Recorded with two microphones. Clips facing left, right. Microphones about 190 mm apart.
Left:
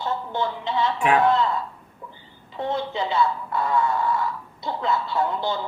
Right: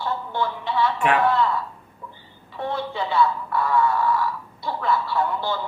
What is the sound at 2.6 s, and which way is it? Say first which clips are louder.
Speech: left 1 dB; 20° left (ahead or behind).